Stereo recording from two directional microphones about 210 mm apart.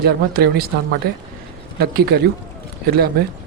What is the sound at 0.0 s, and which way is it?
Speech, 45° right (ahead or behind).